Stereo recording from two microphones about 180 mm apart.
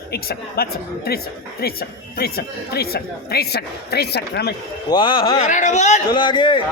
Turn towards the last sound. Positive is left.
turn(degrees=25)  # may be behind; listen again after turning